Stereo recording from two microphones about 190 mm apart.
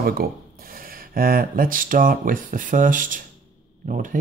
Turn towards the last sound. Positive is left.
turn(degrees=-45)  # may be behind; listen again after turning